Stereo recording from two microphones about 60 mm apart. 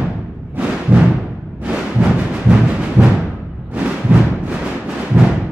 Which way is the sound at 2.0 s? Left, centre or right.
Centre.